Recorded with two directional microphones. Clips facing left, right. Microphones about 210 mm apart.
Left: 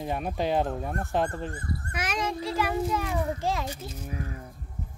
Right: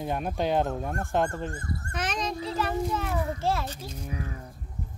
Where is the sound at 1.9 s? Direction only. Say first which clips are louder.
Even; 10° left (ahead or behind).